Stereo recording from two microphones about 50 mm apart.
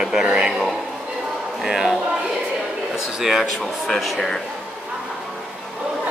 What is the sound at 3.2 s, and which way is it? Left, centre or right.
Speech, centre.